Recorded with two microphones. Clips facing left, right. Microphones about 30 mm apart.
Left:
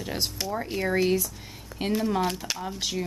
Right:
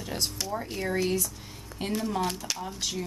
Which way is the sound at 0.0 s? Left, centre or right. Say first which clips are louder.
Left 2 dB; centre.